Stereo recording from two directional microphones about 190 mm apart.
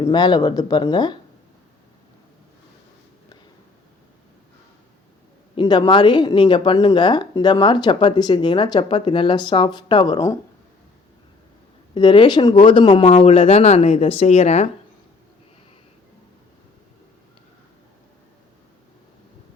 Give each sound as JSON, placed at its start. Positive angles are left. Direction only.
{"t": 0.0, "sound": "a woman's voice", "side_deg": 20}
{"t": 5.5, "sound": "a woman's voice", "side_deg": 25}
{"t": 11.9, "sound": "a woman's voice", "side_deg": 25}